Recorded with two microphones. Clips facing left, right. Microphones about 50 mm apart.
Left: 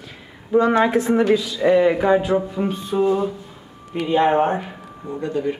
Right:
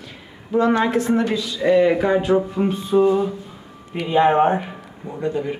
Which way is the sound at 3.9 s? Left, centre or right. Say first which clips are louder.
Right 1 dB; centre.